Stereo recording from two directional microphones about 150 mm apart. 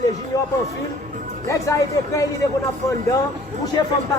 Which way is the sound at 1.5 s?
20° left (ahead or behind).